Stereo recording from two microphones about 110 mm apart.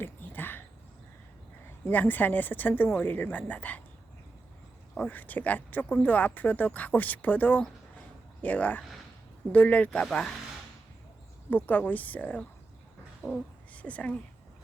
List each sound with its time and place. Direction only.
0.0 s a sound: 20° left (ahead or behind)
1.9 s speech: 15° left (ahead or behind)
4.9 s speech: 15° left (ahead or behind)
11.5 s speech: 15° left (ahead or behind)
13.2 s speech: 25° left (ahead or behind)
13.7 s a woman's voice: 10° left (ahead or behind)